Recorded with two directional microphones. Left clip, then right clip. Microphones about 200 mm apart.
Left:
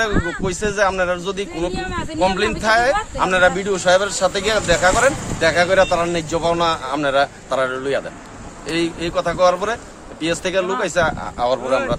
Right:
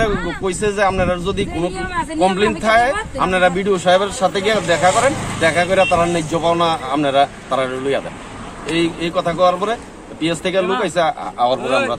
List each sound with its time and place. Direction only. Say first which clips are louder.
0.4 s speech: right 3 dB; 10° left (ahead or behind)